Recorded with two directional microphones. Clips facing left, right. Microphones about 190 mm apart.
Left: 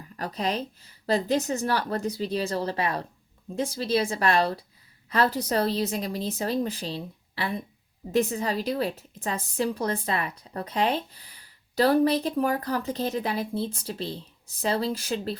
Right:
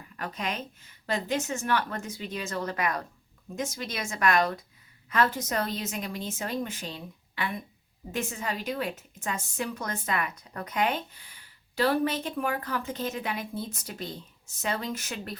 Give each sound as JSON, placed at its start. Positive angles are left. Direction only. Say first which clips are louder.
{"t": 0.2, "sound": "a woman's voice", "louder": "left 5 dB", "side_deg": 35}